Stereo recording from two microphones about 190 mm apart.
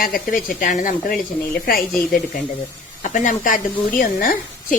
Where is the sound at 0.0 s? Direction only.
50° left (ahead or behind).